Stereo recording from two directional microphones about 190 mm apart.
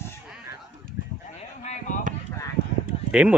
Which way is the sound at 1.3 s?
35° left (ahead or behind).